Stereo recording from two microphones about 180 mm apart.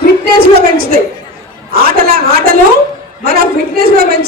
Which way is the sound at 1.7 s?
55° right (ahead or behind).